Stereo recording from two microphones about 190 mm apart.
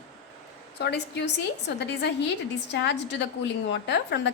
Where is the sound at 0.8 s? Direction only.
65° left (ahead or behind).